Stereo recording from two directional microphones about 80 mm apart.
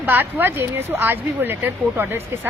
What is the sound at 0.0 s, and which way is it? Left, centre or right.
A woman's voice, right.